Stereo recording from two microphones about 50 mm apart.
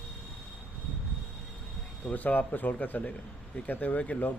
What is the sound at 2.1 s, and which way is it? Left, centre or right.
A man's voice, left.